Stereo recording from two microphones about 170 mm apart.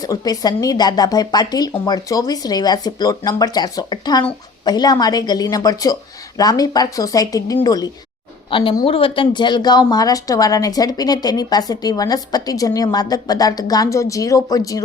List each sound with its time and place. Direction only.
0.0 s speech: 20° left (ahead or behind)